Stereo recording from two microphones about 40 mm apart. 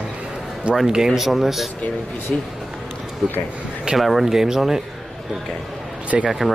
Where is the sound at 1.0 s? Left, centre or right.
Centre.